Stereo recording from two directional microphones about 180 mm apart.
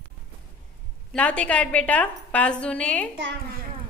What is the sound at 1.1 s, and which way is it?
A woman's voice, 5° left (ahead or behind).